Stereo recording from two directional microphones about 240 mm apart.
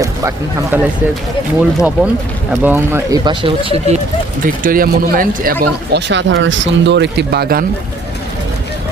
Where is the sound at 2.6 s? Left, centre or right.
Centre.